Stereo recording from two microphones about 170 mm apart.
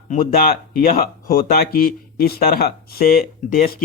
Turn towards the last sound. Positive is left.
turn(degrees=60)  # may be behind; listen again after turning